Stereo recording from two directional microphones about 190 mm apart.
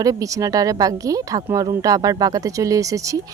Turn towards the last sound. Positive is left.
turn(degrees=-15)  # may be behind; listen again after turning